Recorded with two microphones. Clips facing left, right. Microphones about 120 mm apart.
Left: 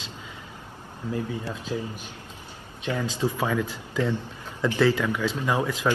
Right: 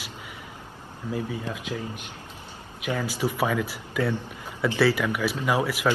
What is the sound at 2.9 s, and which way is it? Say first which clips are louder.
Speech: left 1 dB; 20° left (ahead or behind).